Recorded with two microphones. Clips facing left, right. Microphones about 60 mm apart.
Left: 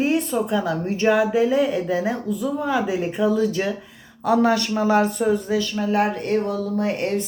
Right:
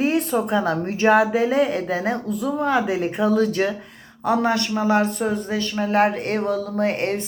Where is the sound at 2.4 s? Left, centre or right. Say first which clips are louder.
Right 2 dB; centre.